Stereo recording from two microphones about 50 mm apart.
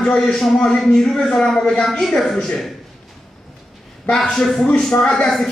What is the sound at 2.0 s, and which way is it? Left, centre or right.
Speech, centre.